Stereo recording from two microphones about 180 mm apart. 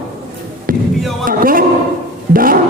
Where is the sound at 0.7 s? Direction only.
50° right (ahead or behind).